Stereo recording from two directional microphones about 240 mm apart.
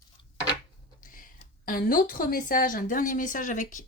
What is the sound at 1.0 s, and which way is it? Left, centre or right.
A woman's voice, left.